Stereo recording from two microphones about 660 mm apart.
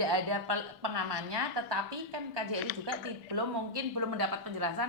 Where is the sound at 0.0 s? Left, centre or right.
Right.